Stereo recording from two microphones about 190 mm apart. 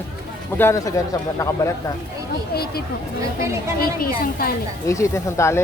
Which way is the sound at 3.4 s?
15° right (ahead or behind).